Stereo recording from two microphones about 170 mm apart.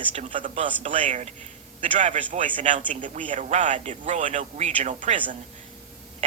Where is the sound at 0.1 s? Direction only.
45° right (ahead or behind).